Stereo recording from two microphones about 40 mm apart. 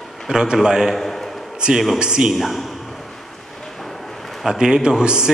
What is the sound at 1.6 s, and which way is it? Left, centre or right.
Speech, right.